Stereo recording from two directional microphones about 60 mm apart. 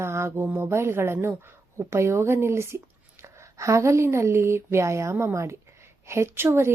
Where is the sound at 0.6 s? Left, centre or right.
Right.